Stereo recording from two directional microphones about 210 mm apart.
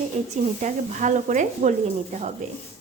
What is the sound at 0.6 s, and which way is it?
A woman's voice, 35° right (ahead or behind).